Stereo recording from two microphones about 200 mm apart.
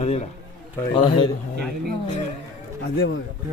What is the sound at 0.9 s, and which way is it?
Speech, 25° left (ahead or behind).